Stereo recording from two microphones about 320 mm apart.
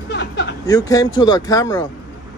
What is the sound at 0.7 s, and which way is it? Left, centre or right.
A man's voice, centre.